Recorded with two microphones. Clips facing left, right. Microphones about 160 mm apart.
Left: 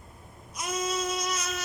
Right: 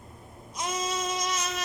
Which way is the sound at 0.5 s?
90° right.